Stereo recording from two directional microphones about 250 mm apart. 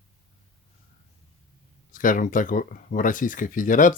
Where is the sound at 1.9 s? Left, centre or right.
Left.